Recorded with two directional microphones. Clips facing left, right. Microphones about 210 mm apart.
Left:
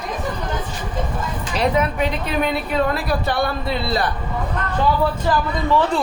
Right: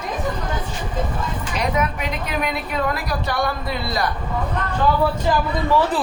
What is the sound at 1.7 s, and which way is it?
A woman's voice, 30° left (ahead or behind).